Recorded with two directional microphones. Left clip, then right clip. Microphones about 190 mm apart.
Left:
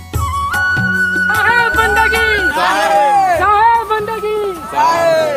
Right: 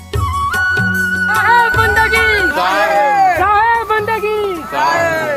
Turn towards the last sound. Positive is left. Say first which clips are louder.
# left 3 dB
turn(degrees=55)  # may be behind; listen again after turning